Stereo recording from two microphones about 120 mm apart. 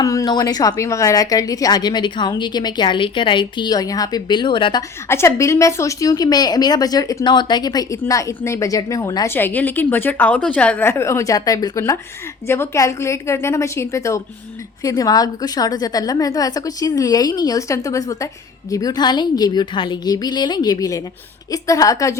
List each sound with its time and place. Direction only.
0.0 s a woman's voice: 30° left (ahead or behind)
5.0 s a woman's voice: 20° left (ahead or behind)